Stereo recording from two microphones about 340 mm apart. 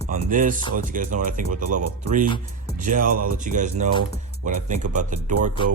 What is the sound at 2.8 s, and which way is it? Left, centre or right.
Speech, right.